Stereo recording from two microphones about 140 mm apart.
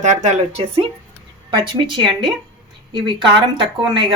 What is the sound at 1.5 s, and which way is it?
Speech, 35° right (ahead or behind).